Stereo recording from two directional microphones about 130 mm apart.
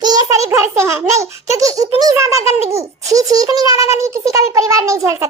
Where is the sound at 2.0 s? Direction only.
25° right (ahead or behind).